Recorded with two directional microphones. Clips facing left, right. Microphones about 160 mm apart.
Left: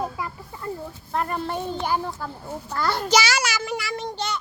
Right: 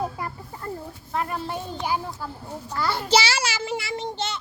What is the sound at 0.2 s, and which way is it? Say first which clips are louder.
Chicken: left 1 dB; 45° right (ahead or behind).